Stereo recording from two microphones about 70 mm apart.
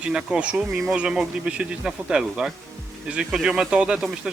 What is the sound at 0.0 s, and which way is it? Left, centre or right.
Speech, centre.